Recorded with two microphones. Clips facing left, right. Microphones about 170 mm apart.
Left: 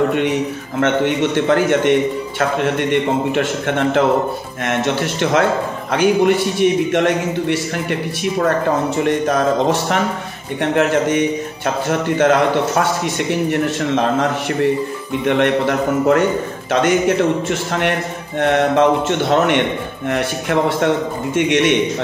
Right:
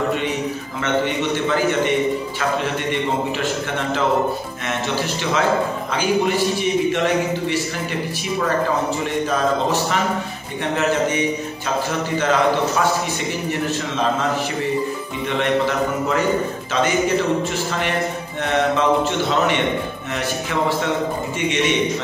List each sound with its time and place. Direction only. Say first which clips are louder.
0.7 s speech: left 6 dB; 60° left (ahead or behind)
8.9 s speech: left 5 dB; 55° left (ahead or behind)
10.6 s speech: left 4 dB; 55° left (ahead or behind)
15.2 s speech: left 4 dB; 60° left (ahead or behind)
17.5 s a man's voice: left 4 dB; 60° left (ahead or behind)